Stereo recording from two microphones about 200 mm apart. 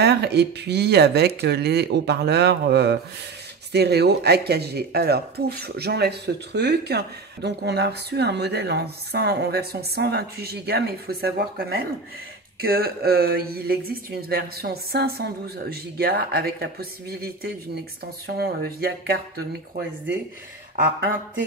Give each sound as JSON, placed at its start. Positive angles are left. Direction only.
{"t": 0.0, "sound": "speech", "side_deg": -55}
{"t": 12.6, "sound": "speech", "side_deg": -50}